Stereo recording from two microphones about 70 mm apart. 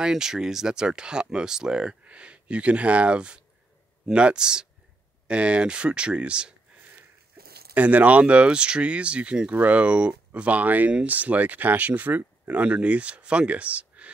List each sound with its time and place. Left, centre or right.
0.0 s speech: centre
7.7 s speech: right